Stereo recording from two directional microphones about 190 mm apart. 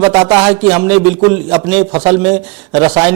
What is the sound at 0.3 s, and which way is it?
Speech, 5° right (ahead or behind).